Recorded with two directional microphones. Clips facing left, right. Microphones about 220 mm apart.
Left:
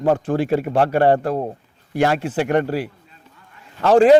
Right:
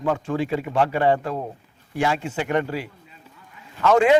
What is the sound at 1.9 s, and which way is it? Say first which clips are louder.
Speech: left 5 dB; 60° left (ahead or behind).